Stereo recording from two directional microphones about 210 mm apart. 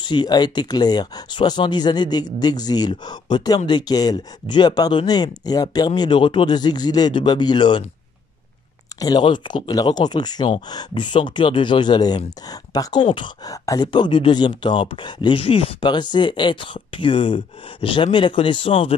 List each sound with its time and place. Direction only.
0.0 s speech: 20° left (ahead or behind)
9.0 s speech: 20° left (ahead or behind)